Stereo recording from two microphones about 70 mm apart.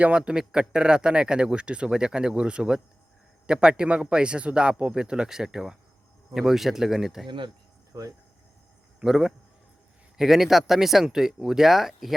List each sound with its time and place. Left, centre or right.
0.0 s speech: centre
9.0 s speech: centre